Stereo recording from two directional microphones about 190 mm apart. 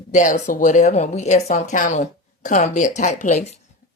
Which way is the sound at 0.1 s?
40° left (ahead or behind).